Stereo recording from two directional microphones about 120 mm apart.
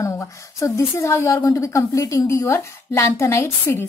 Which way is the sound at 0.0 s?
25° left (ahead or behind).